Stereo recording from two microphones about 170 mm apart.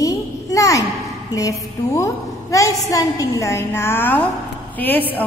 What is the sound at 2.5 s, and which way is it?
A woman's voice, 20° left (ahead or behind).